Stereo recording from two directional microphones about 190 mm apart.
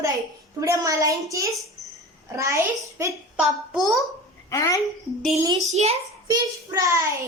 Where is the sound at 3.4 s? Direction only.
Centre (ahead or behind).